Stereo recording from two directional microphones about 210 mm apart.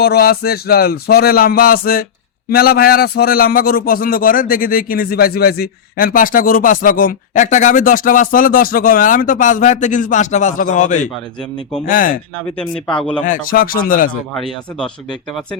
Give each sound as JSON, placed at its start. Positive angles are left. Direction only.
{"t": 0.0, "sound": "a man's voice", "side_deg": 45}
{"t": 13.2, "sound": "a man's voice", "side_deg": 40}
{"t": 14.3, "sound": "speech", "side_deg": 0}